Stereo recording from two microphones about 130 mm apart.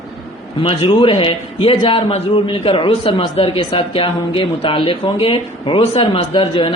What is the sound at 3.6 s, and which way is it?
Speech, 35° left (ahead or behind).